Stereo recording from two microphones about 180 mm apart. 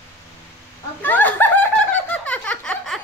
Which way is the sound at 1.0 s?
10° left (ahead or behind).